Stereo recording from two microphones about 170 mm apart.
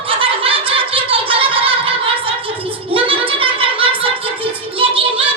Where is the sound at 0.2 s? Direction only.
30° right (ahead or behind).